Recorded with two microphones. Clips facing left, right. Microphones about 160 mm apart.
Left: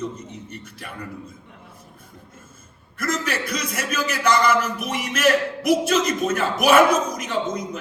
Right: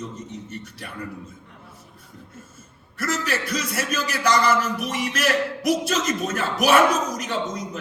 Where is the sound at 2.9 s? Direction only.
35° right (ahead or behind).